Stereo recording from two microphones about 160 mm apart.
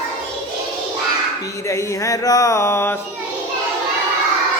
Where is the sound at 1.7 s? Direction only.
20° left (ahead or behind).